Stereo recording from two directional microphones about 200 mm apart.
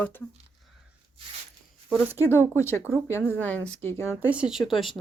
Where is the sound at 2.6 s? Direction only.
15° left (ahead or behind).